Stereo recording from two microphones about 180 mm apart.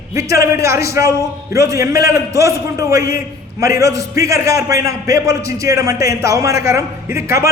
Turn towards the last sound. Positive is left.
turn(degrees=-15)  # may be behind; listen again after turning